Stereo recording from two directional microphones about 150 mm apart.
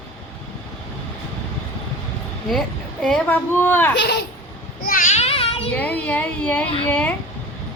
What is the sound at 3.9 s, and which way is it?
Speech, 90° left.